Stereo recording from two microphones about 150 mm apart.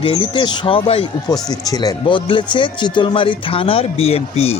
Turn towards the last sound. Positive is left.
turn(degrees=45)  # may be behind; listen again after turning